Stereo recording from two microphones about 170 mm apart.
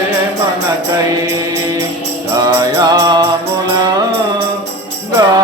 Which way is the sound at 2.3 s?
25° right (ahead or behind).